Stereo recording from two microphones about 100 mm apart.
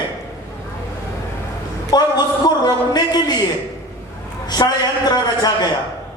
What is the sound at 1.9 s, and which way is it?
A man's voice, 45° left (ahead or behind).